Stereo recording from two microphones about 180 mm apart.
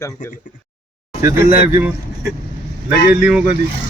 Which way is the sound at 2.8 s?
5° right (ahead or behind).